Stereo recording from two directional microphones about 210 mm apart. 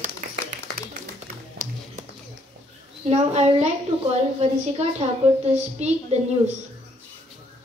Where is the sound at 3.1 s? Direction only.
30° right (ahead or behind).